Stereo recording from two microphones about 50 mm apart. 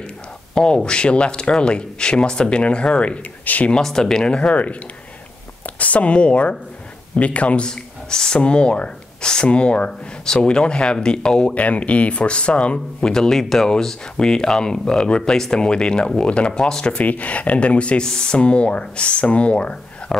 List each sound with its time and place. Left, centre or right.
0.6 s speech: centre
3.7 s speech: centre
5.8 s speech: left
16.9 s speech: left